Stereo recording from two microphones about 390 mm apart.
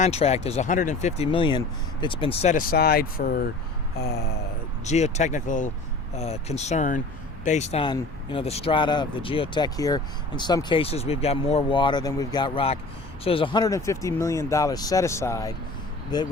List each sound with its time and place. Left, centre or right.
0.0 s speech: centre
4.0 s a sound: left
4.9 s speech: centre